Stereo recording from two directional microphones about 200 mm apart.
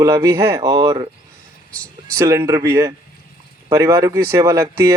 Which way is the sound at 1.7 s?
90° right.